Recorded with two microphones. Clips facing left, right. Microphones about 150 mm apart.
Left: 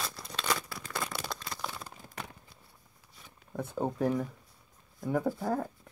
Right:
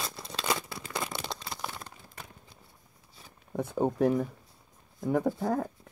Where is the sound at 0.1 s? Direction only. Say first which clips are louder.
Right 2 dB; 25° right (ahead or behind).